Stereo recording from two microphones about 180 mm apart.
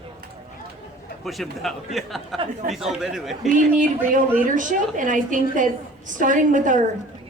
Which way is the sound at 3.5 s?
45° right (ahead or behind).